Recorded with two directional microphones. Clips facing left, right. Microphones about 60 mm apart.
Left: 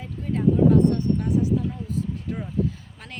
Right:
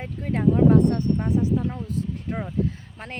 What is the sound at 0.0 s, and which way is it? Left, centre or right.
Speech, right.